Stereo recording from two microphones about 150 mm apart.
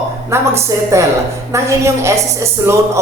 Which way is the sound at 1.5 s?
20° right (ahead or behind).